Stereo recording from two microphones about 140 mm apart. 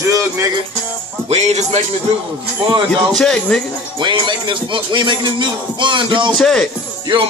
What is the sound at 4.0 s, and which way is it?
Music, 35° right (ahead or behind).